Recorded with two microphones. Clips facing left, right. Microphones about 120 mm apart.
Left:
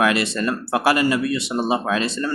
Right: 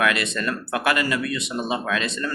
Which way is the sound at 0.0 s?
30° left (ahead or behind).